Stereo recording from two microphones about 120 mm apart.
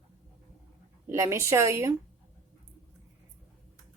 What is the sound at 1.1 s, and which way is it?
Speech, 25° right (ahead or behind).